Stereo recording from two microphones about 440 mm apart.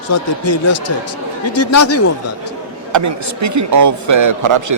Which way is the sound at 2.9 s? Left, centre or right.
Right.